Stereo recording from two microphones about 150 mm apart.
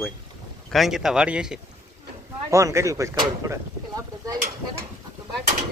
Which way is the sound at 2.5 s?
20° right (ahead or behind).